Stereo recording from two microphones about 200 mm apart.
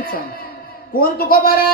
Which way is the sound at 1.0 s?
45° left (ahead or behind).